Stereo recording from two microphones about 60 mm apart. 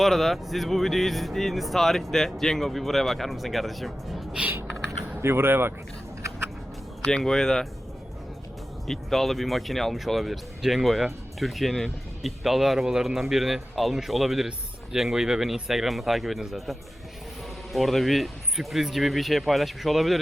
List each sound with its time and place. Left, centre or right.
0.0 s speech: centre
5.2 s speech: right
7.0 s speech: centre
8.9 s speech: centre